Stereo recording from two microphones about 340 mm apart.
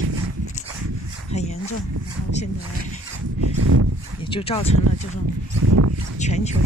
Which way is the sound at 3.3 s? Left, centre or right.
Right.